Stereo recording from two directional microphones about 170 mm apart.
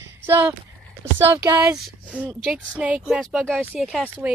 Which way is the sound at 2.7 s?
5° right (ahead or behind).